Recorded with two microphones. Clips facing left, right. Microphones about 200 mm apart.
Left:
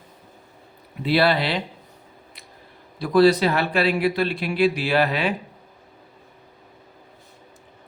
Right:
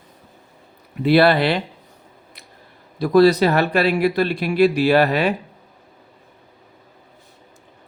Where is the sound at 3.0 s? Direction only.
40° right (ahead or behind).